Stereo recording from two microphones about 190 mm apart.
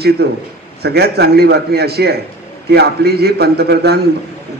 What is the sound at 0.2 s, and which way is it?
A man's voice, 55° right (ahead or behind).